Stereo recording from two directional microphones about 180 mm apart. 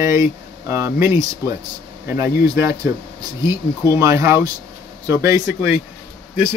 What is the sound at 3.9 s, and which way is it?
A man's voice, 15° right (ahead or behind).